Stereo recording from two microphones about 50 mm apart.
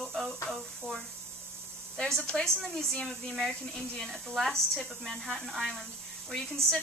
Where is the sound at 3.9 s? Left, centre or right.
Centre.